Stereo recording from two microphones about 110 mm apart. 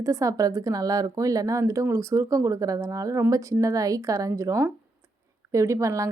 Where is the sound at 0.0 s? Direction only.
30° right (ahead or behind).